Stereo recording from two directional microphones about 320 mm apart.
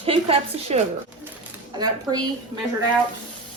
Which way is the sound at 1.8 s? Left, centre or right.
Centre.